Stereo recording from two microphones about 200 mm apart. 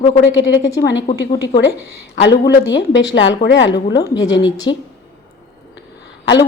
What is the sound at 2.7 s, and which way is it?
A woman's voice, 65° left (ahead or behind).